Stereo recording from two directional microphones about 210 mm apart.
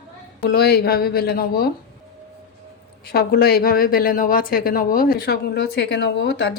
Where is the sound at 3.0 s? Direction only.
45° left (ahead or behind).